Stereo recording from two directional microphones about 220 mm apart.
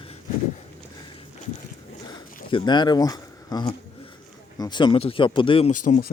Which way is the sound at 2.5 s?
20° left (ahead or behind).